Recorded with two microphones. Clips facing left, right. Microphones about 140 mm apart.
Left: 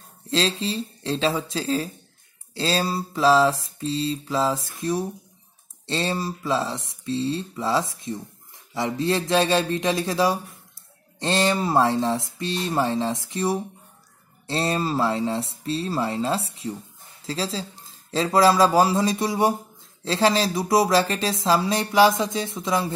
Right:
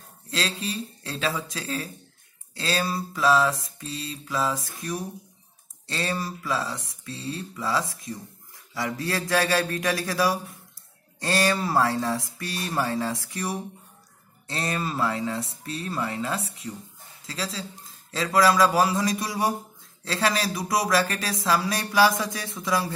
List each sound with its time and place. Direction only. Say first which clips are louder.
0.3 s speech: left 6 dB; 30° left (ahead or behind)